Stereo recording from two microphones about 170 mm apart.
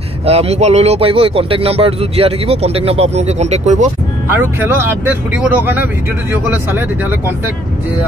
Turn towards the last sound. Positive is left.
turn(degrees=-10)  # may be behind; listen again after turning